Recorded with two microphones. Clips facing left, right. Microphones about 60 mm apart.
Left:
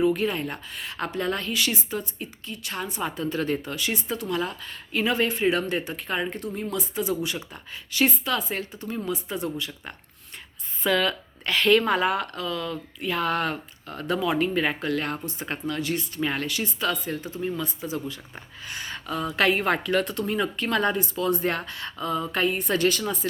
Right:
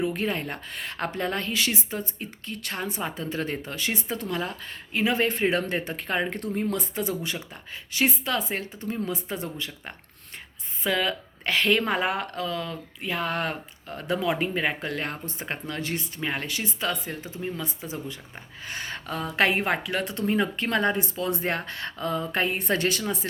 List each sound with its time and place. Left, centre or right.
0.0 s speech: right
4.9 s speech: right
5.2 s speech: right
7.5 s speech: right
10.8 s speech: centre
11.4 s speech: right
18.6 s speech: right
19.4 s speech: right
19.6 s speech: centre
20.1 s speech: right